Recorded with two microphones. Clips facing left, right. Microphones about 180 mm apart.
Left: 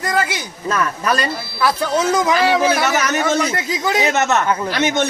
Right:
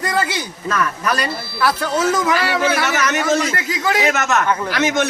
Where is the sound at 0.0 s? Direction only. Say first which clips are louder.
Even; 10° left (ahead or behind).